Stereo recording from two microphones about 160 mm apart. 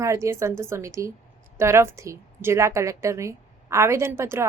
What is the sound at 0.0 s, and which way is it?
A woman's voice, 15° right (ahead or behind).